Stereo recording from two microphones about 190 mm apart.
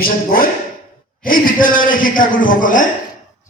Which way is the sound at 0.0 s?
50° left (ahead or behind).